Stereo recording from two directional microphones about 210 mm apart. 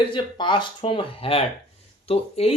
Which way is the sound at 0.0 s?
20° left (ahead or behind).